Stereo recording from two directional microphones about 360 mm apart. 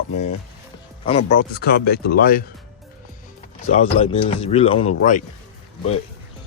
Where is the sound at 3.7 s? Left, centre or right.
Centre.